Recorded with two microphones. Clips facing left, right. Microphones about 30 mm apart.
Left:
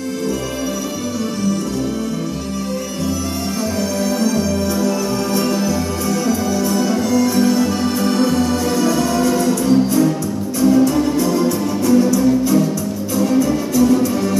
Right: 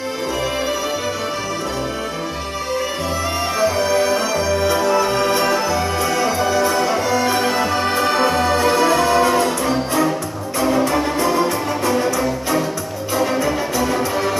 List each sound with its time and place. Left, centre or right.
4.2 s music: right